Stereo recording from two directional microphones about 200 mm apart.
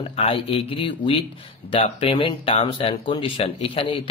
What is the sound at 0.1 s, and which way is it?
Speech, 30° left (ahead or behind).